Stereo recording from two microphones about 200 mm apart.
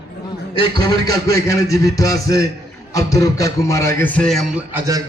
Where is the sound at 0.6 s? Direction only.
20° left (ahead or behind); by 4.6 s centre (ahead or behind).